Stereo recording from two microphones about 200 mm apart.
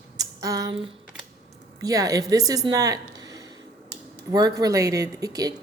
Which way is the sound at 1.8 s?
15° right (ahead or behind).